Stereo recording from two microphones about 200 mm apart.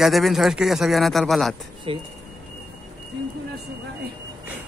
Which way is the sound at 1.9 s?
30° right (ahead or behind).